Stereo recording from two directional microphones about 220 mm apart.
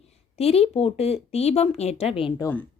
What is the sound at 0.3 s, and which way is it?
A woman's voice, 25° left (ahead or behind).